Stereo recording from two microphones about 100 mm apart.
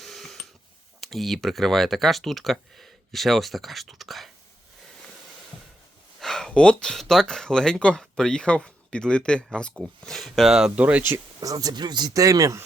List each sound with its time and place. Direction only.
0.0 s a sound: centre (ahead or behind)
1.1 s speech: centre (ahead or behind)
6.1 s speech: 5° left (ahead or behind); by 11.0 s 15° right (ahead or behind)
11.3 s speech: 35° right (ahead or behind)